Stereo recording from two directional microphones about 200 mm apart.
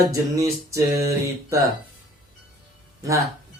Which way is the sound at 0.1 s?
15° right (ahead or behind).